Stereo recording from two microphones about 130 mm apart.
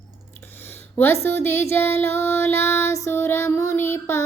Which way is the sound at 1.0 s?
20° left (ahead or behind).